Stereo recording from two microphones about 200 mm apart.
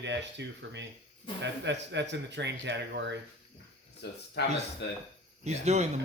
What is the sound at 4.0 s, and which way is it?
Speech, 60° left (ahead or behind).